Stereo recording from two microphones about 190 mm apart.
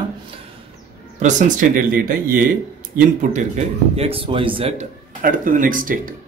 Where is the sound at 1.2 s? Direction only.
45° right (ahead or behind); by 4.8 s 30° right (ahead or behind).